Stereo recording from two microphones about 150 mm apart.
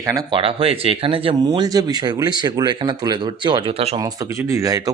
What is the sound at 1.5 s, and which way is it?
Speech, 25° right (ahead or behind).